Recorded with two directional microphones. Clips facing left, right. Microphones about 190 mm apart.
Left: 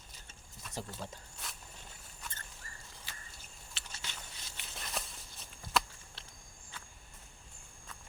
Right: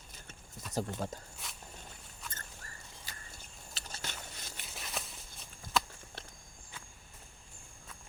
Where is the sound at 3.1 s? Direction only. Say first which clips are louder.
Right 2 dB; 40° right (ahead or behind).